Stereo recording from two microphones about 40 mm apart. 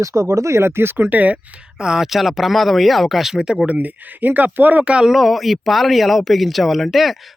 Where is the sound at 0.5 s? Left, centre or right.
Right.